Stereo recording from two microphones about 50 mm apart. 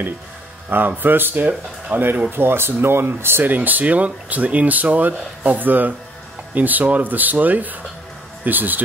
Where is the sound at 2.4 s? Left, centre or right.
Right.